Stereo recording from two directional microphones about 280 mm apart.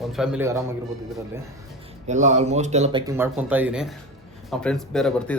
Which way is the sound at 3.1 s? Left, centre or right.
Centre.